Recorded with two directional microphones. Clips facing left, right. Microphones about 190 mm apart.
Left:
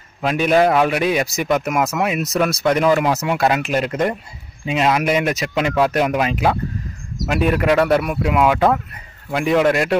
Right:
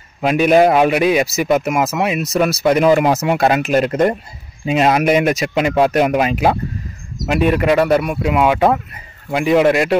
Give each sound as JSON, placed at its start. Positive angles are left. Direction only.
{"t": 0.2, "sound": "a man's voice", "side_deg": -15}
{"t": 3.3, "sound": "speech", "side_deg": -30}
{"t": 5.0, "sound": "a man's voice", "side_deg": -15}
{"t": 7.2, "sound": "a man's voice", "side_deg": 0}